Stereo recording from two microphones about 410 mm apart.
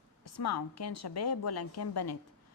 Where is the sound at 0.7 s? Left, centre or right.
Left.